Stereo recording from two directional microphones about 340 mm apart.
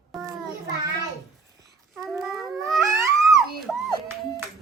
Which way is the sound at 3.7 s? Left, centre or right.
Centre.